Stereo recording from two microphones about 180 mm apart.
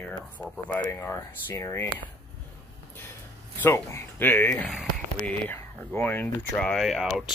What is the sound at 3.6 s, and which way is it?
Speech, 15° left (ahead or behind).